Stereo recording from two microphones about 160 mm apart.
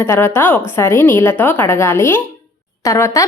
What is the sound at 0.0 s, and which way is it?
A woman's voice, 15° left (ahead or behind).